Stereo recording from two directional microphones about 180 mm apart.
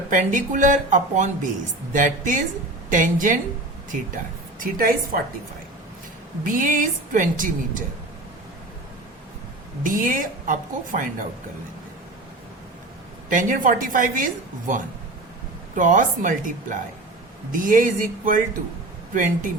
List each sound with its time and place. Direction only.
0.1 s a woman's voice: 45° right (ahead or behind)
4.6 s a woman's voice: 55° right (ahead or behind)
6.4 s a woman's voice: 45° right (ahead or behind)
9.8 s a woman's voice: 45° right (ahead or behind)
13.3 s a woman's voice: 45° right (ahead or behind)
15.7 s a woman's voice: 45° right (ahead or behind)